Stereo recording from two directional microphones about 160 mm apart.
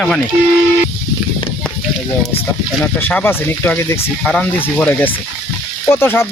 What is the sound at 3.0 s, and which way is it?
Speech, 10° left (ahead or behind).